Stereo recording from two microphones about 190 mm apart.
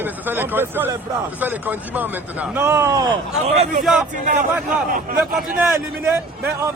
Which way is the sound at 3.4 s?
35° right (ahead or behind).